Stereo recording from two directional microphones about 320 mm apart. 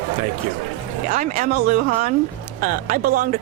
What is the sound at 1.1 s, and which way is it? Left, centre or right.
A woman's voice, right.